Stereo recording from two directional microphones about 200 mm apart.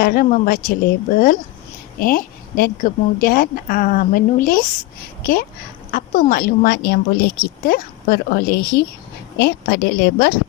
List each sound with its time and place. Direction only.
0.0 s speech: 50° left (ahead or behind)